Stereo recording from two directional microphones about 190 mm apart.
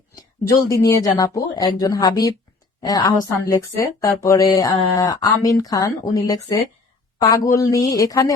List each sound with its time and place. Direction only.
0.2 s a man's voice: 15° left (ahead or behind)